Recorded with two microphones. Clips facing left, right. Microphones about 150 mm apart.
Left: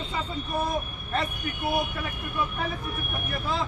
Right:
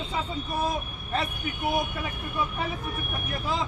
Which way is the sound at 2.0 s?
10° right (ahead or behind).